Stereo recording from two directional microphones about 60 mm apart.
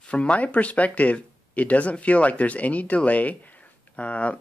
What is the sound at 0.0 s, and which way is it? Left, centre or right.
Speech, centre.